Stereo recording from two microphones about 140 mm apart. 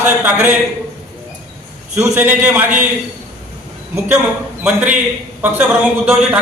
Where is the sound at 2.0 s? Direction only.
20° right (ahead or behind).